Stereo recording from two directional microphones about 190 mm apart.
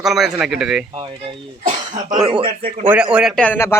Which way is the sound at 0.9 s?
25° right (ahead or behind).